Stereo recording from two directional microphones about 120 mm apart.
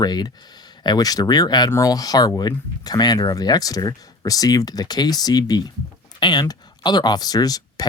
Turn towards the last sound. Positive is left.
turn(degrees=30)  # may be behind; listen again after turning